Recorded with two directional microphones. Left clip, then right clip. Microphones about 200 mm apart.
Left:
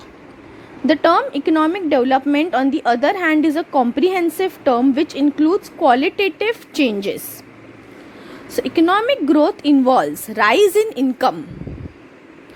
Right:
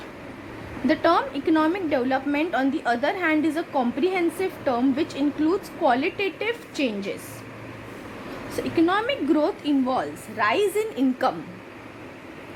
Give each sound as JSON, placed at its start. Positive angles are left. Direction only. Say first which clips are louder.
{"t": 0.9, "sound": "a woman's voice", "louder": "left 6 dB", "side_deg": 40}
{"t": 8.4, "sound": "a woman's voice", "louder": "left 7 dB", "side_deg": 45}